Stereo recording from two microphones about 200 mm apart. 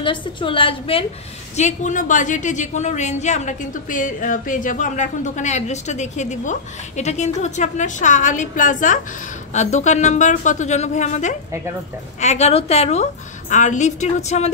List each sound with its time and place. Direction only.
0.0 s a woman's voice: 25° left (ahead or behind)
1.6 s a woman's voice: 40° left (ahead or behind)